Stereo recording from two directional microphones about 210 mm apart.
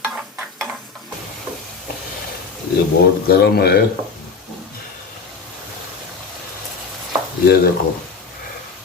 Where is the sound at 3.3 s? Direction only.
50° left (ahead or behind).